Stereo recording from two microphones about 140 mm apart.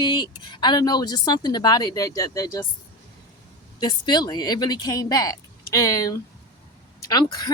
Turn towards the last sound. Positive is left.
turn(degrees=30)  # may be behind; listen again after turning